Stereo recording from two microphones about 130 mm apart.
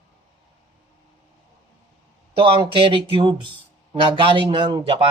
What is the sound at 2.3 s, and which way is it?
A man's voice, 45° right (ahead or behind).